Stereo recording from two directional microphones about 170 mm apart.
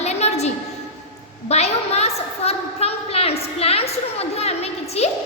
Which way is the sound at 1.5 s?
40° left (ahead or behind).